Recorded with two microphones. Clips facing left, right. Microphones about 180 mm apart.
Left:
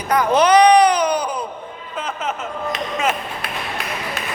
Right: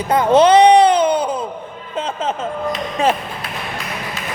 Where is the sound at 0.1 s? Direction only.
25° right (ahead or behind).